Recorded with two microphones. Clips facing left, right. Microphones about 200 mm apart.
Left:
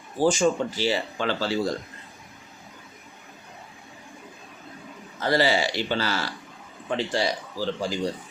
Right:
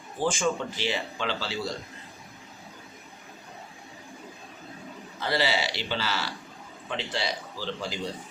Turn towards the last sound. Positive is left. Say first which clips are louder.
# left 6 dB
turn(degrees=45)  # may be behind; listen again after turning